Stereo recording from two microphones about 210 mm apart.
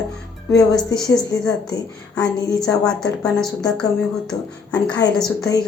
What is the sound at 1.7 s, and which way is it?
Speech, 15° left (ahead or behind).